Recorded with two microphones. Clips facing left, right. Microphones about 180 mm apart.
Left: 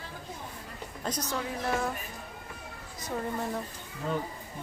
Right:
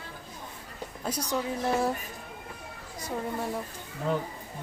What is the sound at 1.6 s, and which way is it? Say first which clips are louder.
Speech: right 3 dB; 30° right (ahead or behind).